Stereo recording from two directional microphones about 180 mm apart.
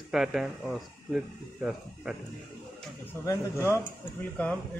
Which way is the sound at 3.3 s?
15° left (ahead or behind).